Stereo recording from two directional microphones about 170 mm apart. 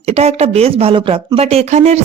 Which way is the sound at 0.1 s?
40° right (ahead or behind).